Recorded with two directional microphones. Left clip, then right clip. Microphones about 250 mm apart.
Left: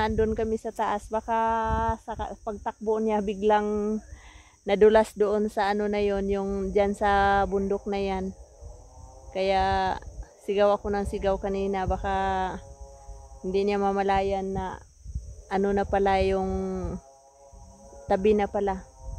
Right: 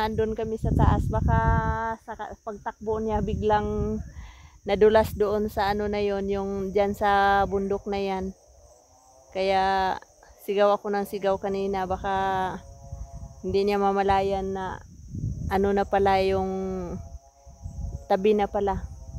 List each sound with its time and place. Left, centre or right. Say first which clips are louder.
0.0 s speech: left 1 dB; centre
9.3 s speech: right 1 dB; right
18.0 s speech: right 1 dB; right